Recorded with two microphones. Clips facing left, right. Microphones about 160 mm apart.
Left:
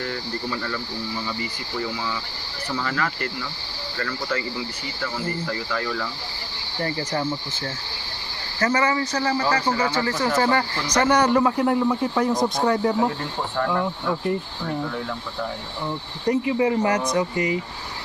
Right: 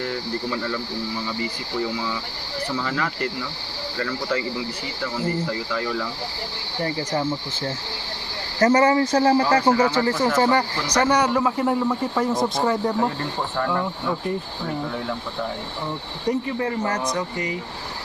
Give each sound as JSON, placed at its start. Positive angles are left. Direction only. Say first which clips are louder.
{"t": 0.0, "sound": "speech", "louder": "right 2 dB", "side_deg": -10}
{"t": 2.8, "sound": "speech", "louder": "right 1 dB", "side_deg": -20}
{"t": 8.5, "sound": "speech", "louder": "right 5 dB", "side_deg": -45}
{"t": 10.0, "sound": "speech", "louder": "right 3 dB", "side_deg": -30}
{"t": 10.3, "sound": "speech", "louder": "even", "side_deg": -20}
{"t": 10.9, "sound": "a man's voice", "louder": "left 1 dB", "side_deg": -10}
{"t": 16.2, "sound": "a man's voice", "louder": "left 2 dB", "side_deg": 0}
{"t": 16.6, "sound": "a man's voice", "louder": "left 4 dB", "side_deg": 10}